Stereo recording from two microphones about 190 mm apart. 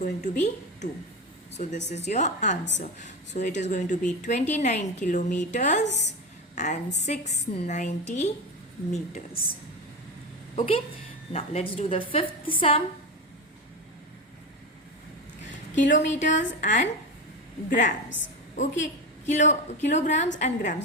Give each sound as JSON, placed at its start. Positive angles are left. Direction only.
{"t": 0.0, "sound": "speech", "side_deg": 40}
{"t": 7.0, "sound": "speech", "side_deg": 35}
{"t": 10.5, "sound": "a woman's voice", "side_deg": 30}
{"t": 15.7, "sound": "speech", "side_deg": 40}